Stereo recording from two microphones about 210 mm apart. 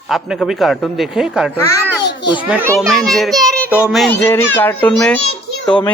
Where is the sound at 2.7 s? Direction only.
Centre (ahead or behind).